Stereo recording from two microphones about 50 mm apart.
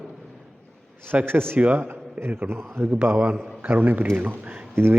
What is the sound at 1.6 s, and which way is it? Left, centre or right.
Speech, right.